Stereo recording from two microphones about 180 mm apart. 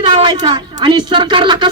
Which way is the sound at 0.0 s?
25° right (ahead or behind).